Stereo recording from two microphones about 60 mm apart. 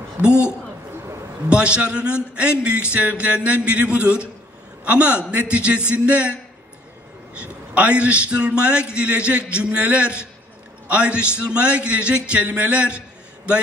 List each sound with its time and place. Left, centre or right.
1.5 s a man's voice: centre
7.7 s a man's voice: right